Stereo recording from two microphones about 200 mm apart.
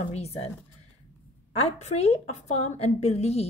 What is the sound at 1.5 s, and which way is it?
A woman's voice, 30° left (ahead or behind).